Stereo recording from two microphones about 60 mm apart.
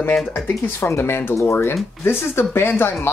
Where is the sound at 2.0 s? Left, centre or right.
Left.